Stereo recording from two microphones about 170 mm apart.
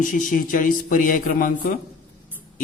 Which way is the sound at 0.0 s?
50° left (ahead or behind).